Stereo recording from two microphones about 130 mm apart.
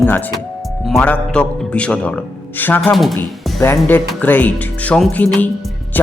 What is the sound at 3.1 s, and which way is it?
Speech, 20° left (ahead or behind).